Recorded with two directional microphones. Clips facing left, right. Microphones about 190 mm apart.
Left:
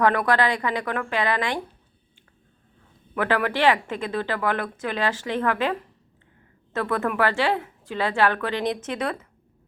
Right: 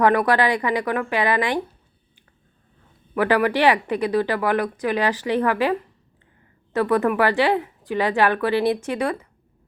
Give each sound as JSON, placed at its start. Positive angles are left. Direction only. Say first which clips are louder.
{"t": 0.3, "sound": "a woman's voice", "louder": "right 3 dB", "side_deg": -20}
{"t": 3.2, "sound": "speech", "louder": "right 4 dB", "side_deg": -15}
{"t": 6.7, "sound": "speech", "louder": "right 5 dB", "side_deg": -15}